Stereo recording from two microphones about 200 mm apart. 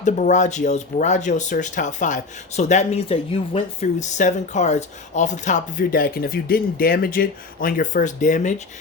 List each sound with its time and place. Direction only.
0.0 s speech: 35° left (ahead or behind)